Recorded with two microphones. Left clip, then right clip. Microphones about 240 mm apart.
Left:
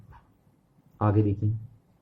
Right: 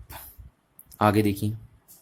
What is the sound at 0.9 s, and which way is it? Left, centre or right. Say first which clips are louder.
Speech: right 5 dB; right.